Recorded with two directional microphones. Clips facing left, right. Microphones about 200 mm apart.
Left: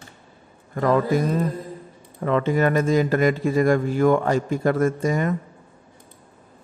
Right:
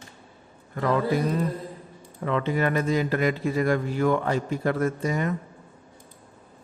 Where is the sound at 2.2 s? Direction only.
45° left (ahead or behind).